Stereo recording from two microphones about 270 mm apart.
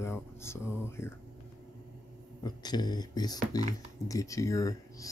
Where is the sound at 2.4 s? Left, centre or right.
Centre.